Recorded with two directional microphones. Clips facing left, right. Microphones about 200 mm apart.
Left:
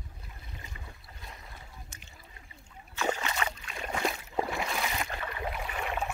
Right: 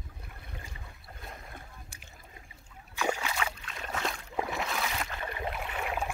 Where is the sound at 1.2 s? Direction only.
50° right (ahead or behind).